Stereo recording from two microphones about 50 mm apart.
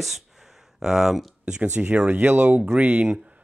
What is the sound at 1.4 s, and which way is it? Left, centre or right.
Speech, right.